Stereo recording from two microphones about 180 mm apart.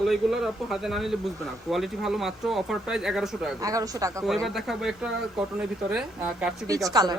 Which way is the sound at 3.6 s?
20° right (ahead or behind).